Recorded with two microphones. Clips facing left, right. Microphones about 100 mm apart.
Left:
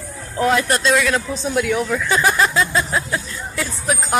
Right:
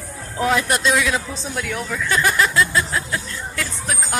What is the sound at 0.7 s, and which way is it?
Speech, 15° right (ahead or behind).